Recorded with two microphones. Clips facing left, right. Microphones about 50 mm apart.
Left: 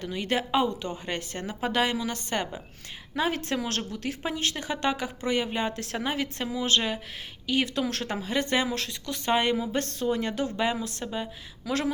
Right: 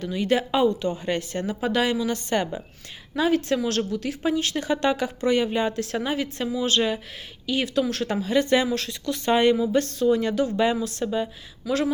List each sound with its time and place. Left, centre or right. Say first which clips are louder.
0.0 s a woman's voice: right 5 dB; left
4.5 s speech: right 5 dB; centre; by 6.7 s left
6.7 s speech: right 3 dB; left
7.4 s a woman's voice: right 3 dB; left
8.0 s speech: right 6 dB; left
10.6 s speech: right 5 dB; left
11.6 s speech: right 5 dB; left